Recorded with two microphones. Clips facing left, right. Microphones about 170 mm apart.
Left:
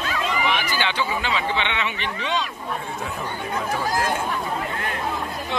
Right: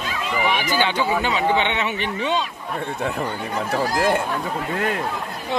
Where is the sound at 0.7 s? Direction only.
45° right (ahead or behind).